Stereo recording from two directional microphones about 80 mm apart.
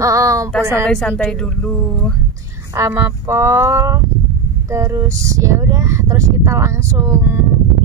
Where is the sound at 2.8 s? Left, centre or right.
Right.